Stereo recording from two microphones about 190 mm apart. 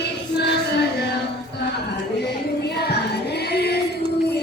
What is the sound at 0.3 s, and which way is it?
Music, 60° left (ahead or behind).